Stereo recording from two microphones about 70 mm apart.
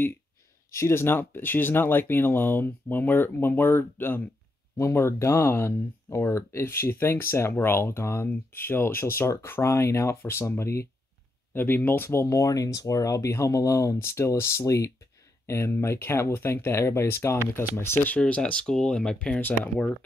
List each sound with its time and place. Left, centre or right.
0.7 s speech: left
4.7 s speech: left
11.5 s speech: left
18.2 s speech: centre